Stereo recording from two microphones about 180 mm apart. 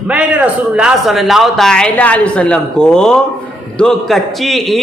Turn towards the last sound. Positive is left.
turn(degrees=0)  # may be behind; listen again after turning